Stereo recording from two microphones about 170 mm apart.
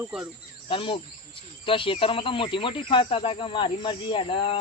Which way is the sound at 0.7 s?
30° left (ahead or behind).